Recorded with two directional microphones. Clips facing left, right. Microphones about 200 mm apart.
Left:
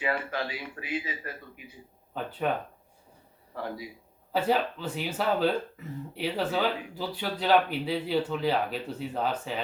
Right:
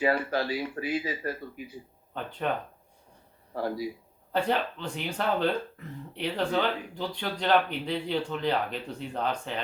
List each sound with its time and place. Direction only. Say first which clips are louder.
0.0 s speech: right 4 dB; 35° right (ahead or behind)
2.1 s speech: left 2 dB; 5° left (ahead or behind)
3.5 s speech: right 5 dB; 40° right (ahead or behind)
4.3 s speech: left 1 dB; 5° left (ahead or behind)